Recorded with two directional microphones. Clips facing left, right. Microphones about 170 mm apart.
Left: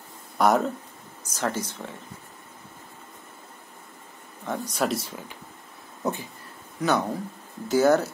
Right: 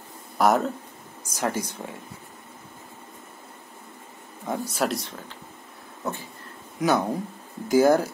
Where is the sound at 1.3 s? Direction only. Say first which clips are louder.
Right 1 dB; 10° right (ahead or behind).